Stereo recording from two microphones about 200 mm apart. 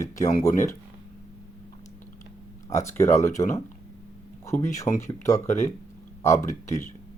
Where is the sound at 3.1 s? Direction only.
35° left (ahead or behind).